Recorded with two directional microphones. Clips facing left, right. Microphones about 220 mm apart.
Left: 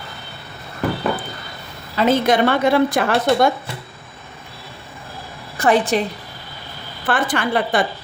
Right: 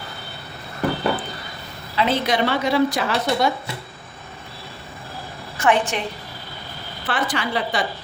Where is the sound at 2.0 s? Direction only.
45° left (ahead or behind).